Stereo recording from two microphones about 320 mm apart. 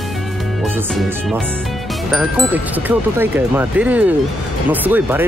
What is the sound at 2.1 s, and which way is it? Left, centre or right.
Speech, centre.